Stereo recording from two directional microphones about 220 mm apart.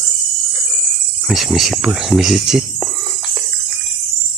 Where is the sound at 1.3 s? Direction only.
Centre (ahead or behind).